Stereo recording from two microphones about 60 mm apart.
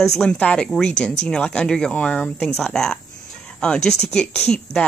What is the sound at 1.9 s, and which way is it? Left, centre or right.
Speech, left.